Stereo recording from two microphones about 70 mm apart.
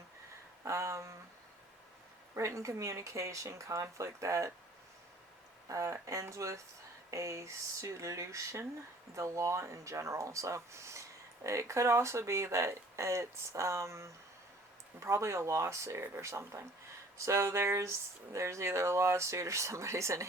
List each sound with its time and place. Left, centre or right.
0.6 s a sound: right
2.3 s speech: right
5.6 s speech: right